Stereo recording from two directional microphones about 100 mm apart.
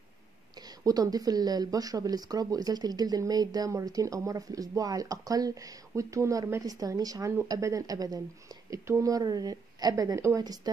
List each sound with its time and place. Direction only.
0.6 s a woman's voice: 40° right (ahead or behind)